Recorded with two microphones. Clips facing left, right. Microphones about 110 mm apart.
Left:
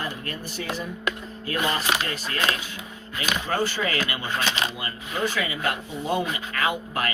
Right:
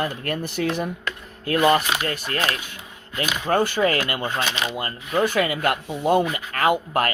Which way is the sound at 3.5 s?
55° right (ahead or behind).